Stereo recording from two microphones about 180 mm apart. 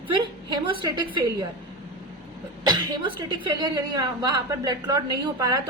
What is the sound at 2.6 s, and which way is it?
A woman's voice, 25° right (ahead or behind).